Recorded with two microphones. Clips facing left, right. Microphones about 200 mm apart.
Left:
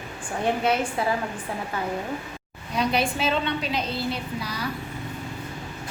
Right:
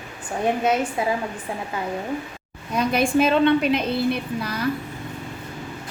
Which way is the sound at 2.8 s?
50° right (ahead or behind).